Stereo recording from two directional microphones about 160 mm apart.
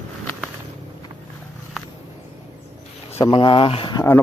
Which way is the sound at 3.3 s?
30° left (ahead or behind).